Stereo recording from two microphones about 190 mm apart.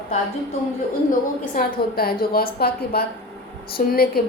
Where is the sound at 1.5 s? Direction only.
50° left (ahead or behind).